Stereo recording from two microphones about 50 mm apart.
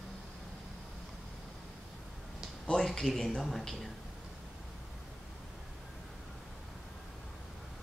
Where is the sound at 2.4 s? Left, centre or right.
Centre.